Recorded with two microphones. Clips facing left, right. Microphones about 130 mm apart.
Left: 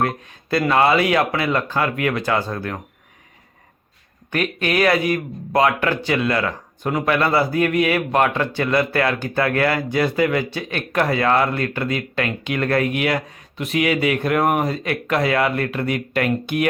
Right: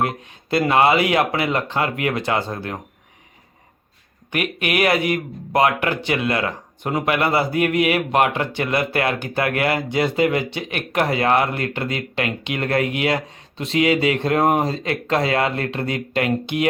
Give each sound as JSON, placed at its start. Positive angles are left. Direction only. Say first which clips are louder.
{"t": 0.0, "sound": "speech", "louder": "left 1 dB", "side_deg": -20}
{"t": 4.3, "sound": "speech", "louder": "left 1 dB", "side_deg": -15}